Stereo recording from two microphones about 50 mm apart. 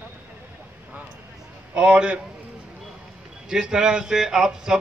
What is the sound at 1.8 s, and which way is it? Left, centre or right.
Speech, right.